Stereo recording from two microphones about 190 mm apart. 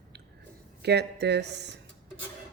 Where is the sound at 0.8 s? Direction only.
60° right (ahead or behind).